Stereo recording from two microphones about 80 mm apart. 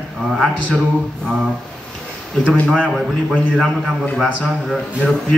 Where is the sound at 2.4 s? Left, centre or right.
Centre.